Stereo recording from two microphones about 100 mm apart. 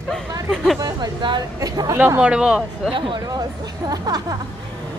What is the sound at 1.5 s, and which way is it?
Speech, 40° right (ahead or behind).